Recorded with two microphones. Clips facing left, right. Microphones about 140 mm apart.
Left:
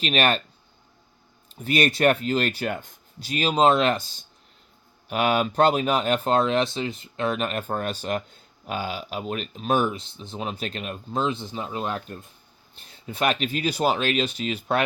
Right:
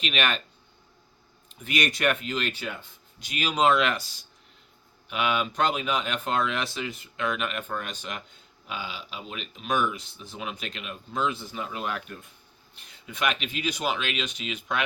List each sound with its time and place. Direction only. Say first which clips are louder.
0.0 s speech: left 6 dB; 35° left (ahead or behind)
1.5 s speech: left 6 dB; 35° left (ahead or behind)
5.0 s speech: left 5 dB; 40° left (ahead or behind)